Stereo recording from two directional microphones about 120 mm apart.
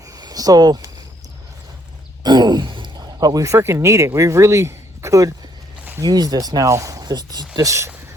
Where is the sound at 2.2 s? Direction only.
35° right (ahead or behind).